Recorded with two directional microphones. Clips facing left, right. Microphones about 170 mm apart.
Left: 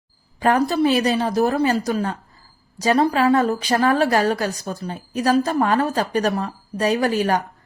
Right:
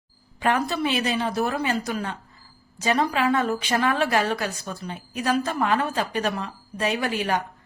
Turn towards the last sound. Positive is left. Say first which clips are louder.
# left 6 dB
turn(degrees=40)  # may be behind; listen again after turning